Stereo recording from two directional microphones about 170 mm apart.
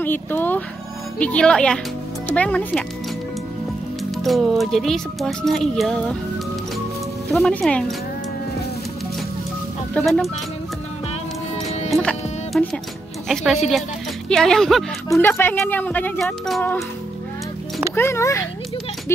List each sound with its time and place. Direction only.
0.0 s speech: 10° left (ahead or behind)
4.2 s speech: centre (ahead or behind)
7.3 s speech: centre (ahead or behind)
9.9 s speech: centre (ahead or behind)
11.9 s music: 5° left (ahead or behind)
13.3 s speech: centre (ahead or behind)
15.0 s speech: 15° left (ahead or behind)
17.9 s speech: 15° left (ahead or behind)